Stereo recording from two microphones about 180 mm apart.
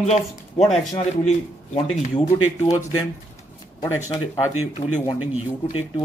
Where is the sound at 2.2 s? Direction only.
20° left (ahead or behind).